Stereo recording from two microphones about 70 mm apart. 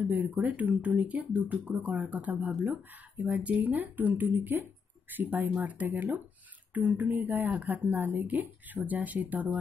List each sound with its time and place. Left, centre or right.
0.0 s speech: centre